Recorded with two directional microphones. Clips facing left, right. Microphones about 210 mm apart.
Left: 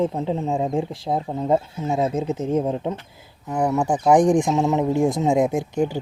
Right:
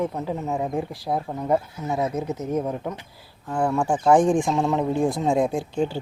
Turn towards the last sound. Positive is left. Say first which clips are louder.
# left 2 dB
turn(degrees=15)  # may be behind; listen again after turning